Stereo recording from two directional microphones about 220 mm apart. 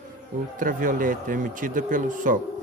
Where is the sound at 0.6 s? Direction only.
40° right (ahead or behind).